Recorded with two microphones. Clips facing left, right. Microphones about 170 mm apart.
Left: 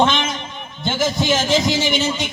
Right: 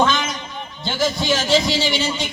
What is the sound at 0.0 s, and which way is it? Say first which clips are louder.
Speech: left 1 dB; 25° left (ahead or behind).